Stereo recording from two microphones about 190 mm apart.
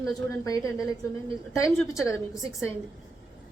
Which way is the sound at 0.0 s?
20° left (ahead or behind).